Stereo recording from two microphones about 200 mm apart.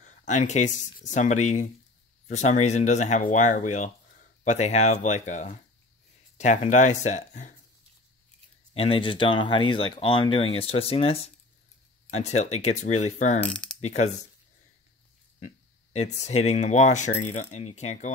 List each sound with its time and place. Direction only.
0.0 s speech: 35° left (ahead or behind)
8.7 s speech: 25° left (ahead or behind)
13.5 s coin: 5° left (ahead or behind)
13.7 s speech: 35° left (ahead or behind)
15.4 s speech: 35° left (ahead or behind)